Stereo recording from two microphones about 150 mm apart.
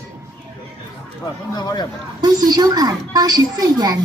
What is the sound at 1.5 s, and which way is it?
Speech, 30° left (ahead or behind).